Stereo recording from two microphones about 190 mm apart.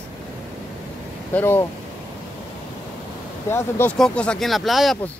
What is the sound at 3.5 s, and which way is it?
A man's voice, 10° left (ahead or behind).